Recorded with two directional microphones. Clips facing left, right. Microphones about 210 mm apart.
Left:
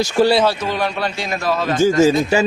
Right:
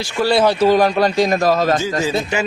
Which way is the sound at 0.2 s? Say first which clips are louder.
Left 3 dB; 35° left (ahead or behind).